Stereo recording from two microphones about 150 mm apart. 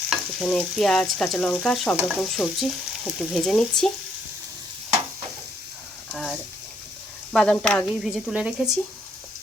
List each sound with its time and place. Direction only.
0.1 s stir: 5° left (ahead or behind)
6.1 s speech: centre (ahead or behind)
7.3 s stir: 5° left (ahead or behind)